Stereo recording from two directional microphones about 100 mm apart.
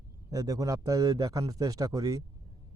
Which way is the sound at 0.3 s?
35° right (ahead or behind).